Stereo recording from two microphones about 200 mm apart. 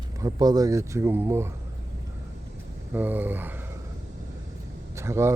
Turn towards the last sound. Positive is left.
turn(degrees=-15)  # may be behind; listen again after turning